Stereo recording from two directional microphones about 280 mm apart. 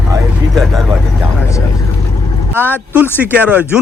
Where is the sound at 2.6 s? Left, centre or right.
Centre.